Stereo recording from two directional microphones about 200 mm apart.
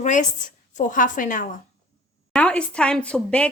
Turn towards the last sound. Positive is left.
turn(degrees=5)  # may be behind; listen again after turning